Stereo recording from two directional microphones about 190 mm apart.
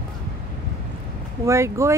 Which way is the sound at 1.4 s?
15° right (ahead or behind).